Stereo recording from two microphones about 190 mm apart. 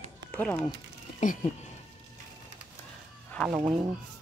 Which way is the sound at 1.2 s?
40° left (ahead or behind).